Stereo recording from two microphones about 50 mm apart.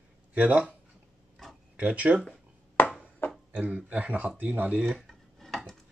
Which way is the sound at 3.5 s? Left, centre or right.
Right.